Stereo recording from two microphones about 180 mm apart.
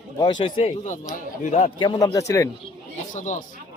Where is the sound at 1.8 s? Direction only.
25° left (ahead or behind).